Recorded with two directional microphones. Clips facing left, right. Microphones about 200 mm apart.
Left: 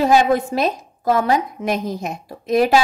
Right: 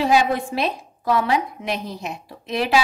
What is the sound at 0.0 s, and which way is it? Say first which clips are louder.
A woman's voice: left 4 dB; 45° left (ahead or behind).